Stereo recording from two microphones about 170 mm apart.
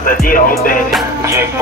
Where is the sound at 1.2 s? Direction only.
15° right (ahead or behind).